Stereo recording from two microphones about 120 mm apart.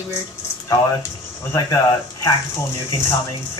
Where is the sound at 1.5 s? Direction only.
30° left (ahead or behind).